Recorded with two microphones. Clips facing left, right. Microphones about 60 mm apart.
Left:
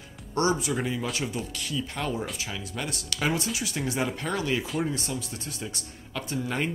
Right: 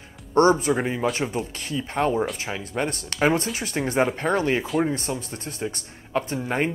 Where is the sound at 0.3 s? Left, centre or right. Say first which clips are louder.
Right 8 dB; right.